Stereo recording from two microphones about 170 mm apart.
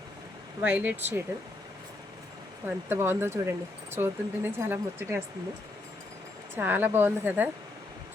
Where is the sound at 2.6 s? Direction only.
15° right (ahead or behind).